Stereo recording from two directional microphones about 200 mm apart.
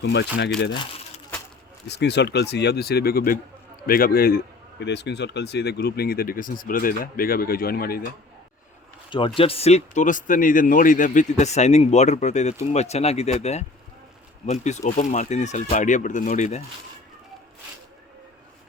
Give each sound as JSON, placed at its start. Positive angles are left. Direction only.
{"t": 0.0, "sound": "speech", "side_deg": 60}
{"t": 1.9, "sound": "speech", "side_deg": 60}
{"t": 9.0, "sound": "speech", "side_deg": 25}